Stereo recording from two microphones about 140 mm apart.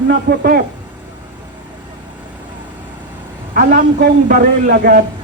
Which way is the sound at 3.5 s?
90° right.